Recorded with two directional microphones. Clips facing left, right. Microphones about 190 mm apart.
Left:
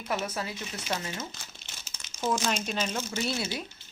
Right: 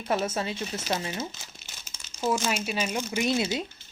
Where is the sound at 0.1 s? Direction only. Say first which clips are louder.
Right 5 dB; 25° right (ahead or behind).